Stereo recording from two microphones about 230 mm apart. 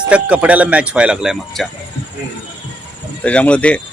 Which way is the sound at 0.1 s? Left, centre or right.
Centre.